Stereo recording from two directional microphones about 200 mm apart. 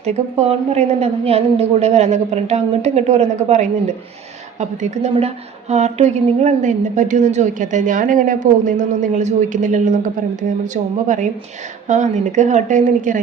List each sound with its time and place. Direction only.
0.0 s a woman's voice: 35° right (ahead or behind)
11.9 s a woman's voice: 35° right (ahead or behind)